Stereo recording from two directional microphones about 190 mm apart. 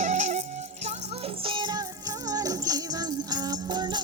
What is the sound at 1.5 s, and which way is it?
Music, 25° right (ahead or behind).